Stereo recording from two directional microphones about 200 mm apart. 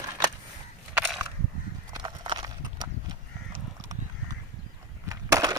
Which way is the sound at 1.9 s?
25° right (ahead or behind).